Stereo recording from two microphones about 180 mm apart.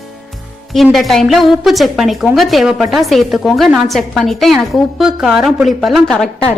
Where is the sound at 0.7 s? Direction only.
Centre (ahead or behind).